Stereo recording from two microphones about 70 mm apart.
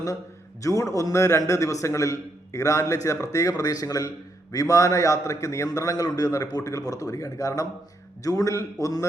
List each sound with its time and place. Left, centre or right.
0.6 s a man's voice: left